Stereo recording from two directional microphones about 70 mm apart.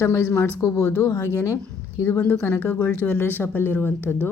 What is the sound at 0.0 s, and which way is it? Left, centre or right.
Speech, left.